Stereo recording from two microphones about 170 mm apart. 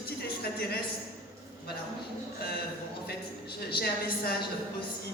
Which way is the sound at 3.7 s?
65° left (ahead or behind).